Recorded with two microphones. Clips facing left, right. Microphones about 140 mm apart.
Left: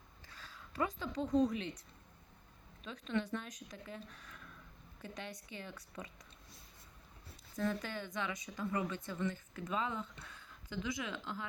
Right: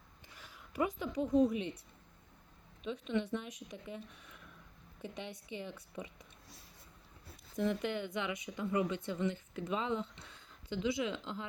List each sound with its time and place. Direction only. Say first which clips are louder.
0.3 s a woman's voice: left 1 dB; 20° right (ahead or behind)
2.8 s a woman's voice: right 3 dB; 20° right (ahead or behind)
7.6 s speech: right 4 dB; 20° right (ahead or behind)